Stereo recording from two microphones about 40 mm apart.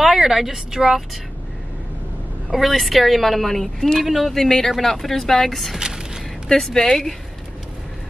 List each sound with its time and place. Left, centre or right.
0.0 s speech: centre
2.5 s a woman's voice: centre
4.0 s a woman's voice: centre
4.3 s a woman's voice: centre
5.8 s a sound: centre
6.5 s speech: centre